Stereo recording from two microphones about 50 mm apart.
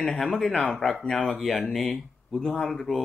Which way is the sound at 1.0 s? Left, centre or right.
Centre.